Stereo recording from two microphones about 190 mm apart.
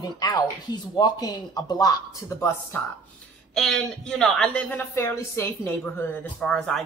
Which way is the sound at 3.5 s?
Centre (ahead or behind).